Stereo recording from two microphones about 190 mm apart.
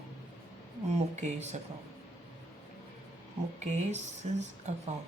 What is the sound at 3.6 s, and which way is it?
Speech, 40° right (ahead or behind).